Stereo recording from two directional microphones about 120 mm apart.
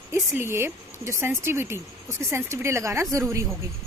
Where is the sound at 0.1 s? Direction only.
20° right (ahead or behind).